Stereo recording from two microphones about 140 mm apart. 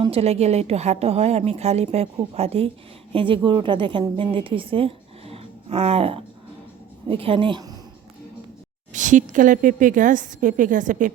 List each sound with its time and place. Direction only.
0.0 s a woman's voice: 45° right (ahead or behind)
8.9 s a woman's voice: 65° right (ahead or behind)